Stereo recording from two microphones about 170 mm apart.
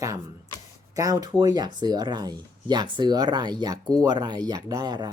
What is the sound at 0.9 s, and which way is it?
Speech, 20° right (ahead or behind).